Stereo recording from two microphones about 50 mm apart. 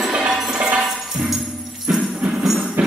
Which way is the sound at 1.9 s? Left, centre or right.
Right.